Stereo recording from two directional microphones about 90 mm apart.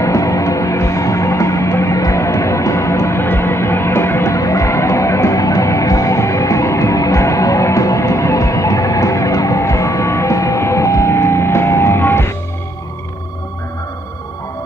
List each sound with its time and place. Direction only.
0.0 s music: 35° left (ahead or behind)